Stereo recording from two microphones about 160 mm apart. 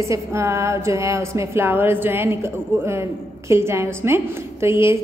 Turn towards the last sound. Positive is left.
turn(degrees=-15)  # may be behind; listen again after turning